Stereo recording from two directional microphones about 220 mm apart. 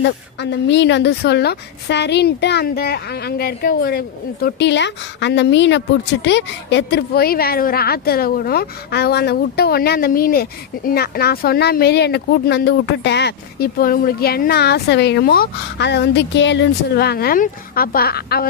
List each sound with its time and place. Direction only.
0.0 s a woman's voice: 50° left (ahead or behind)